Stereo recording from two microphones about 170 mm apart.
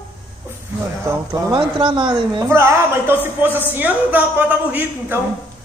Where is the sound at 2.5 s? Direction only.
15° right (ahead or behind).